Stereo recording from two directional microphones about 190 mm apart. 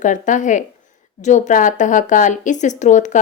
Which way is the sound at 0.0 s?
40° left (ahead or behind).